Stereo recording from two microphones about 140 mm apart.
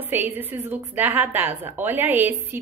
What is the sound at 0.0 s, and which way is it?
A woman's voice, 15° right (ahead or behind).